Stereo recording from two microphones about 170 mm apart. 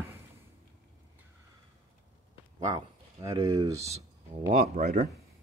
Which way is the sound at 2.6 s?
20° right (ahead or behind).